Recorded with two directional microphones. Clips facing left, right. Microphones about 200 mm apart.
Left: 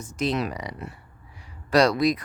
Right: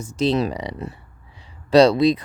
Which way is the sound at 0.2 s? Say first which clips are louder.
Right 6 dB; 30° right (ahead or behind).